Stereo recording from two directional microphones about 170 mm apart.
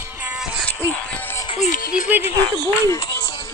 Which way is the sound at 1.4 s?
40° left (ahead or behind).